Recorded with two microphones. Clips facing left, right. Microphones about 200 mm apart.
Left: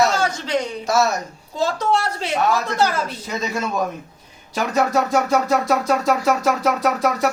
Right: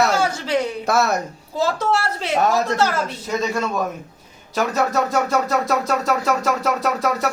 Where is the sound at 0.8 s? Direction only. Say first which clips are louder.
Left 3 dB; 60° right (ahead or behind).